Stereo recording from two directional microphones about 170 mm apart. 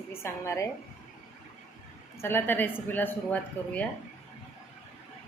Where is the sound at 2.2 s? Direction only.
15° left (ahead or behind).